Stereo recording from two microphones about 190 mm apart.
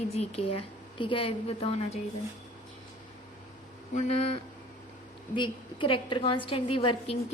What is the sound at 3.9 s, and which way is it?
Speech, 35° left (ahead or behind).